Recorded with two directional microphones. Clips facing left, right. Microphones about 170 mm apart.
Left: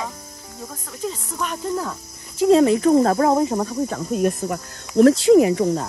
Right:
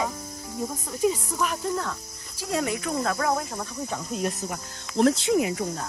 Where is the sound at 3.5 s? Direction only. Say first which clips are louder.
Left 10 dB; 70° left (ahead or behind).